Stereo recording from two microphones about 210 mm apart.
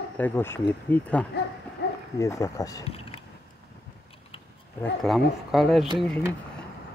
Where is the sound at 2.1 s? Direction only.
15° left (ahead or behind).